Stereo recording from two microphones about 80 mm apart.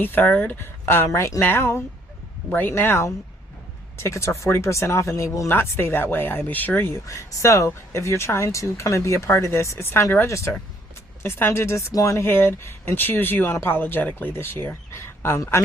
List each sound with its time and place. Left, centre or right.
0.0 s speech: left
5.5 s speech: left
7.0 s speech: left